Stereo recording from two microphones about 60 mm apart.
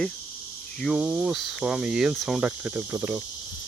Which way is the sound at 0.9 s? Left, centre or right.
Centre.